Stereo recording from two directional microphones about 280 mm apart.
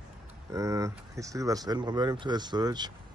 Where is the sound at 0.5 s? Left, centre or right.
Centre.